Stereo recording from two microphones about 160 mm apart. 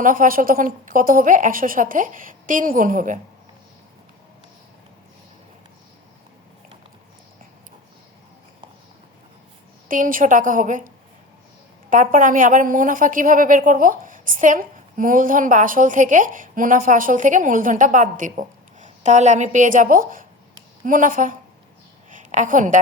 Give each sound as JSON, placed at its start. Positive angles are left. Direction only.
{"t": 0.0, "sound": "a woman's voice", "side_deg": -60}
{"t": 9.9, "sound": "a woman's voice", "side_deg": -60}